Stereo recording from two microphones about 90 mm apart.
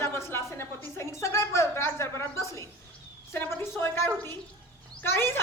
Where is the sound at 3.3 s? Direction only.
25° left (ahead or behind).